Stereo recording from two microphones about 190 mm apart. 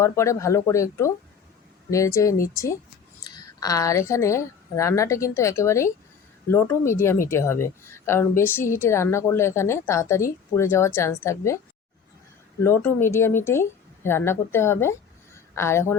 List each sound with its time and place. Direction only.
0.0 s a woman's voice: 15° left (ahead or behind)
12.6 s a woman's voice: 10° left (ahead or behind)